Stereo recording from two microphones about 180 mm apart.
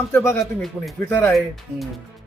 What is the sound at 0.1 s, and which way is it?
A man's voice, 15° left (ahead or behind).